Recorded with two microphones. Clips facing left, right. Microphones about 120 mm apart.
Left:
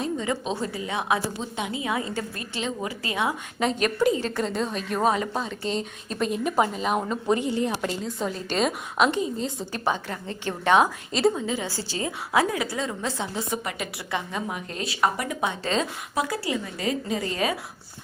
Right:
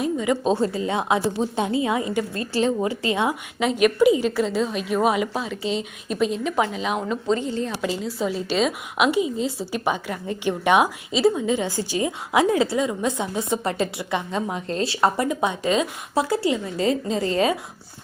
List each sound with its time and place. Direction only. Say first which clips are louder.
0.0 s a sound: right 5 dB; 15° right (ahead or behind)
0.5 s a woman's voice: right 7 dB; 25° right (ahead or behind)
1.4 s a woman's voice: right 8 dB; 35° right (ahead or behind)
2.3 s a woman's voice: right 9 dB; 35° right (ahead or behind)
2.9 s a woman's voice: right 5 dB; 25° right (ahead or behind)
3.6 s a woman's voice: right 5 dB; 5° right (ahead or behind)
6.8 s a woman's voice: right 1 dB; centre (ahead or behind)
7.4 s a woman's voice: left 1 dB; 15° left (ahead or behind)
7.8 s a woman's voice: right 3 dB; 5° right (ahead or behind)
11.4 s a woman's voice: right 6 dB; 20° right (ahead or behind)
12.8 s a woman's voice: right 5 dB; 15° right (ahead or behind)
13.7 s a woman's voice: right 7 dB; 30° right (ahead or behind); by 15.9 s 15° right (ahead or behind)
16.1 s a woman's voice: right 6 dB; 30° right (ahead or behind)